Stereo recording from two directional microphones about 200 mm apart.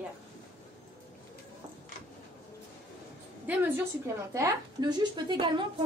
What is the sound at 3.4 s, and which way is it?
Speech, 10° right (ahead or behind).